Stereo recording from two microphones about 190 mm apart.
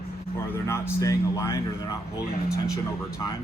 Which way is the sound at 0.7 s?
15° left (ahead or behind).